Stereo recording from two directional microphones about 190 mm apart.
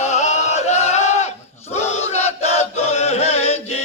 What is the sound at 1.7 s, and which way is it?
Chant, 35° left (ahead or behind).